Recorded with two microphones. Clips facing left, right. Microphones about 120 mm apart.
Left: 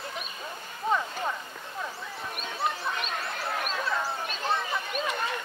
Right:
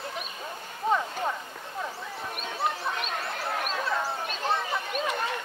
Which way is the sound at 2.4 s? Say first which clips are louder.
Right 1 dB; 35° right (ahead or behind).